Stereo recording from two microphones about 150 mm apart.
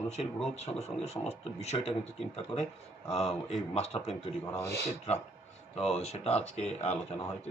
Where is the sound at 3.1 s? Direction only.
45° left (ahead or behind).